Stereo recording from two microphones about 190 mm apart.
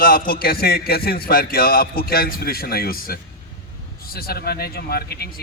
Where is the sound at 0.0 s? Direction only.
50° left (ahead or behind).